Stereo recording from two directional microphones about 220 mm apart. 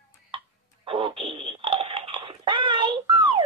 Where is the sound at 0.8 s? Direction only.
25° right (ahead or behind).